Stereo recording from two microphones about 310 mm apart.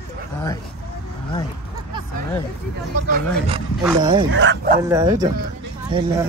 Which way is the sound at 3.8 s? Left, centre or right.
Centre.